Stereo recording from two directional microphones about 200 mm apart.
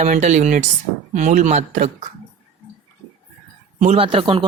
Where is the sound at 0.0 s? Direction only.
35° right (ahead or behind).